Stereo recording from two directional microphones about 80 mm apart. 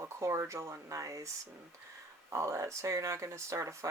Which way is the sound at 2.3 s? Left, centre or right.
Right.